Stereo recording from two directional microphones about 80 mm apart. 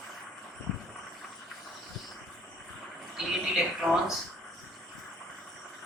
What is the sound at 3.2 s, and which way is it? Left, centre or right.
Speech, centre.